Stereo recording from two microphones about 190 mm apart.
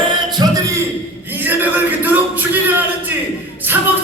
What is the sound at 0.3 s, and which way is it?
Music, 20° right (ahead or behind).